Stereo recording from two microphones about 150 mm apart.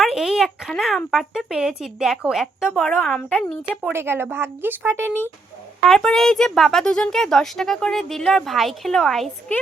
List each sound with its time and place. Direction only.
0.0 s speech: centre (ahead or behind)
3.9 s speech: 15° right (ahead or behind)
5.8 s speech: 5° left (ahead or behind)